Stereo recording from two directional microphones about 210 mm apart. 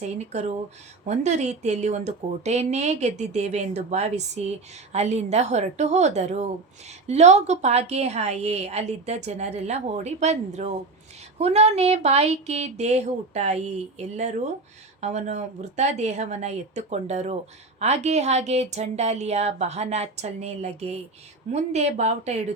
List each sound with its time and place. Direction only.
0.0 s speech: 30° right (ahead or behind)